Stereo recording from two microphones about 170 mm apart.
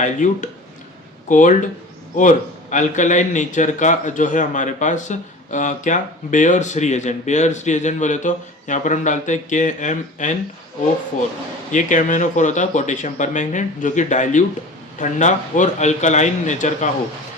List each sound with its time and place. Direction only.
0.0 s a man's voice: 50° left (ahead or behind)
11.7 s a man's voice: 50° left (ahead or behind)